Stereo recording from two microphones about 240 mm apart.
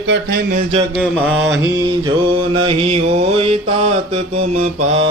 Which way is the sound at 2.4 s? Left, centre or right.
Right.